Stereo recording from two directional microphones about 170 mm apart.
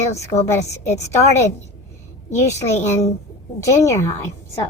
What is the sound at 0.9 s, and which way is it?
Speech, 15° left (ahead or behind).